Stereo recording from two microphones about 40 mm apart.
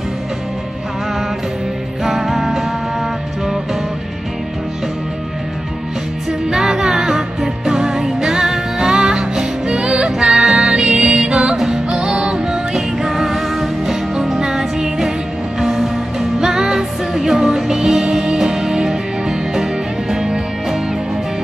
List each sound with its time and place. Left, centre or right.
2.0 s music: centre
6.5 s music: centre
10.1 s music: centre